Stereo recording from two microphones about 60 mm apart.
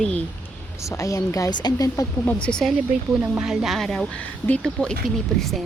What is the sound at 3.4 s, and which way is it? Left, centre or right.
Speech, centre.